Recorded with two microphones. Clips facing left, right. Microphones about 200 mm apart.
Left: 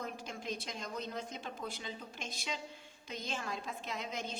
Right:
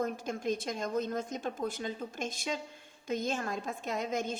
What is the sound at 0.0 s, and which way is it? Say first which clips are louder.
A woman's voice: right 9 dB; 50° right (ahead or behind).